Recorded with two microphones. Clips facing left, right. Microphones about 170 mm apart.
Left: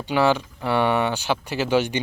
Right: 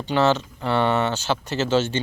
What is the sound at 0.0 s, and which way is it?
Speech, 10° left (ahead or behind).